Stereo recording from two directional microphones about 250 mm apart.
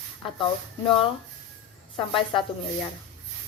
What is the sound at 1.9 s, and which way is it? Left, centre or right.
Speech, left.